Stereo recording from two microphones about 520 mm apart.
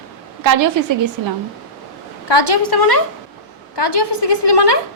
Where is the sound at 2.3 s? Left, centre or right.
Left.